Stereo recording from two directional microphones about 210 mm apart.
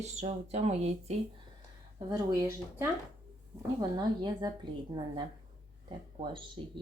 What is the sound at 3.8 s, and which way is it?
Speech, 20° right (ahead or behind).